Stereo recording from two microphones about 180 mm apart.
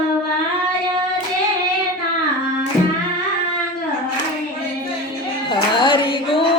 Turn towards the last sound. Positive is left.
turn(degrees=30)  # may be behind; listen again after turning